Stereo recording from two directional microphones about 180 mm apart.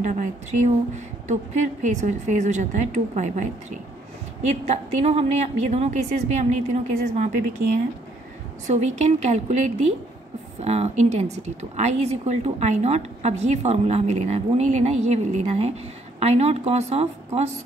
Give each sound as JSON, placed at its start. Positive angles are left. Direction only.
{"t": 0.0, "sound": "speech", "side_deg": -45}
{"t": 4.6, "sound": "speech", "side_deg": -35}
{"t": 8.6, "sound": "speech", "side_deg": -40}